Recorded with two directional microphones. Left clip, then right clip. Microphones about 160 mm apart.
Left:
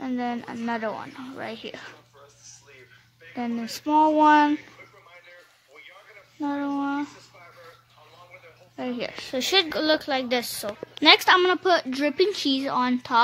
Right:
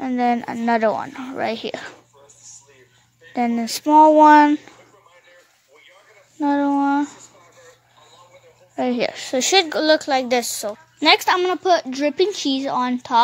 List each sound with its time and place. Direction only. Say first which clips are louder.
0.0 s speech: right 10 dB; 45° right (ahead or behind)
3.3 s speech: right 9 dB; 45° right (ahead or behind)
6.4 s speech: right 9 dB; 45° right (ahead or behind)
8.7 s speech: right 10 dB; 50° right (ahead or behind)
11.0 s a woman's voice: right 1 dB; 25° right (ahead or behind)